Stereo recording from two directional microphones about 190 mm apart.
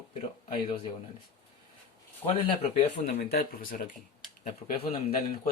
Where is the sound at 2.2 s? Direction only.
30° left (ahead or behind).